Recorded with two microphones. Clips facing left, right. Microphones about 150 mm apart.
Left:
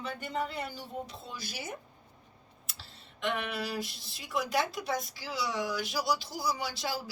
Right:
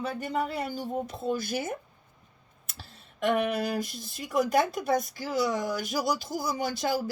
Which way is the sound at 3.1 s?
45° right (ahead or behind).